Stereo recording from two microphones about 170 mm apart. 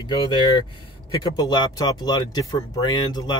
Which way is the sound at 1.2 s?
25° left (ahead or behind).